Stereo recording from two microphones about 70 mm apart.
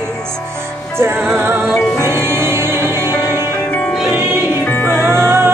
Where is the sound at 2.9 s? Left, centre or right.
Left.